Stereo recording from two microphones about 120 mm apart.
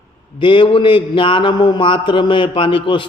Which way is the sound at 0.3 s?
45° left (ahead or behind).